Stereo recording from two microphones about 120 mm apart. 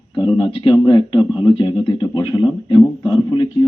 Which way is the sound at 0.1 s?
40° left (ahead or behind).